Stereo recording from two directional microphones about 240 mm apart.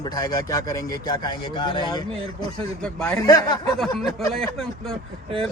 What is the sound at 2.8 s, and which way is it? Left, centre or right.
Speech, centre.